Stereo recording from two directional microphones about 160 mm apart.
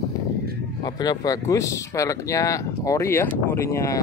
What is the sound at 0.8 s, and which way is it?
Speech, 25° left (ahead or behind).